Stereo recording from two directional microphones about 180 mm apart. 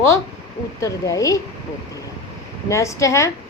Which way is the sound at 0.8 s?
20° left (ahead or behind).